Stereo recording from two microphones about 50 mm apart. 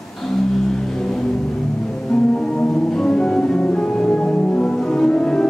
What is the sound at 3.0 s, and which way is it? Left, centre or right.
Music, centre.